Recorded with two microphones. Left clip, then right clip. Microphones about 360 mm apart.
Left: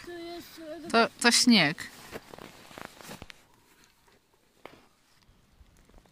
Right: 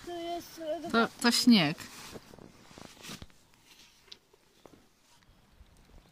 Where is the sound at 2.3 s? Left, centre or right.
Left.